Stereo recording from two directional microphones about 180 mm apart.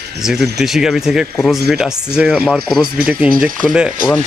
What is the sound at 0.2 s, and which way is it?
Speech, centre (ahead or behind).